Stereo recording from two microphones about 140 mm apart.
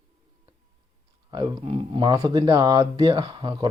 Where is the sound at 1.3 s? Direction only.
30° right (ahead or behind).